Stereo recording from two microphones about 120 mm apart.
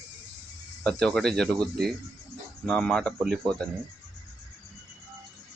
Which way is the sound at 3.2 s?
5° right (ahead or behind).